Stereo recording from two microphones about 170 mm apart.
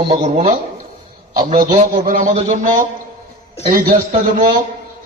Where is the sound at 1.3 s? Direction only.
55° right (ahead or behind).